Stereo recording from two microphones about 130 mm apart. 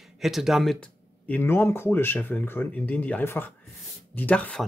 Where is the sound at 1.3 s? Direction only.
15° left (ahead or behind).